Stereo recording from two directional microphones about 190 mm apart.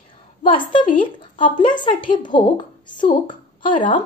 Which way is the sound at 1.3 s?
45° left (ahead or behind).